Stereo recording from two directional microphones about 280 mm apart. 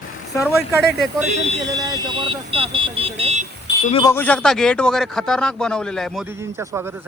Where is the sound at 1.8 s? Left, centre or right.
Centre.